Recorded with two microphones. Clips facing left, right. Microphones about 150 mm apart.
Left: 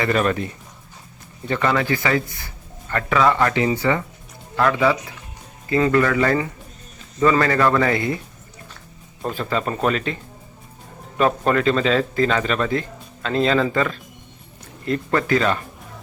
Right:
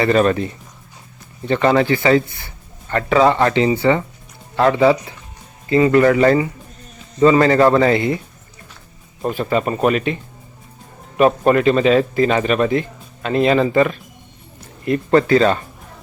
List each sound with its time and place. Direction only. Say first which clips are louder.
0.0 s speech: right 5 dB; 30° right (ahead or behind)
1.5 s speech: right 6 dB; 30° right (ahead or behind)
6.0 s speech: right 6 dB; 25° right (ahead or behind)
9.2 s speech: right 5 dB; 15° right (ahead or behind)
11.2 s speech: right 5 dB; 15° right (ahead or behind)
15.1 s speech: right 7 dB; 30° right (ahead or behind)